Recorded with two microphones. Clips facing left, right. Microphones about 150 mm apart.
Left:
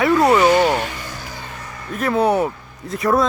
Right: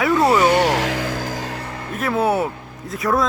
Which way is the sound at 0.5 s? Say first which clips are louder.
Left 1 dB; 80° right.